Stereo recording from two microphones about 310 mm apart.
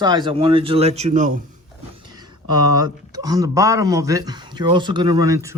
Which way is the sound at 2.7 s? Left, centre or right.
Centre.